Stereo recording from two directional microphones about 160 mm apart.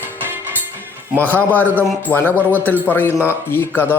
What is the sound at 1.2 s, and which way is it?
Speech, 10° left (ahead or behind).